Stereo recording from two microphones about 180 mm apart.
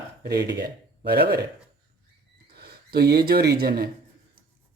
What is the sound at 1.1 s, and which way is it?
Speech, 60° right (ahead or behind).